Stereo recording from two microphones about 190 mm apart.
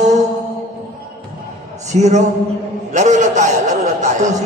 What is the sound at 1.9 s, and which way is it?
A man's voice, 35° right (ahead or behind).